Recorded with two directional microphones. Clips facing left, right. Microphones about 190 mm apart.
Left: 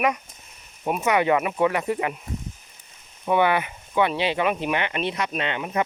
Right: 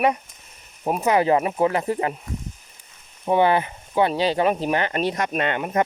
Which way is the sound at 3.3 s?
35° right (ahead or behind).